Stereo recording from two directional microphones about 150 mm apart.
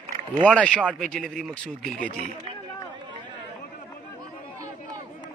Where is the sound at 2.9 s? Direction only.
30° right (ahead or behind).